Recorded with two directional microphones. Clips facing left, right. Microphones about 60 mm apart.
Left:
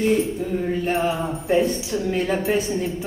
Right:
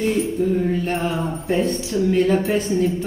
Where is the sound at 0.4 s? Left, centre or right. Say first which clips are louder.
Right 4 dB; centre.